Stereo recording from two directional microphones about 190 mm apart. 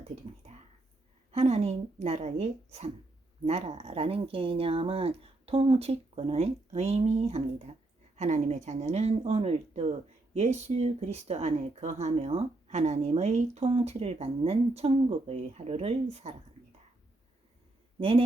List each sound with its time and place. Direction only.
1.3 s speech: 35° right (ahead or behind)